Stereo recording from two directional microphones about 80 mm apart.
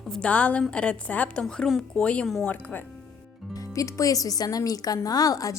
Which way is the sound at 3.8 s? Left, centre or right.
Left.